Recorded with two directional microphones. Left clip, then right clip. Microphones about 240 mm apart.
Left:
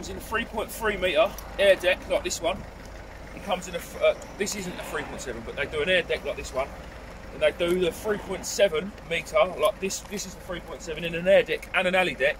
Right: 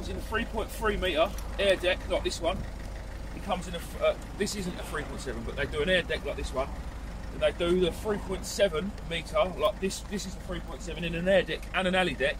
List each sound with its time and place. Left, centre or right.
0.3 s speech: centre
3.5 s speech: centre